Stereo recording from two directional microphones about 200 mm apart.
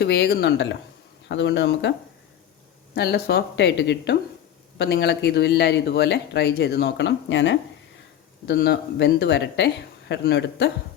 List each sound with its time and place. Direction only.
0.0 s speech: 55° left (ahead or behind)
2.9 s speech: 55° left (ahead or behind)